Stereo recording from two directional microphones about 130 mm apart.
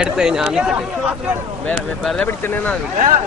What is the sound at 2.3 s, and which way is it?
Speech, 15° left (ahead or behind).